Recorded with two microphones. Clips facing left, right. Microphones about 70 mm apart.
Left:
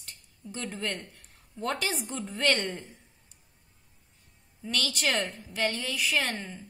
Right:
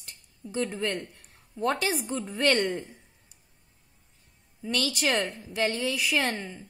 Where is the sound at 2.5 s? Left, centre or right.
Centre.